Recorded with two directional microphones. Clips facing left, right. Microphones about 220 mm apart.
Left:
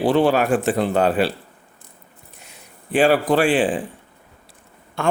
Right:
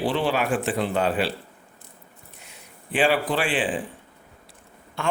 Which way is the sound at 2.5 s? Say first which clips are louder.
Left 7 dB; 40° left (ahead or behind).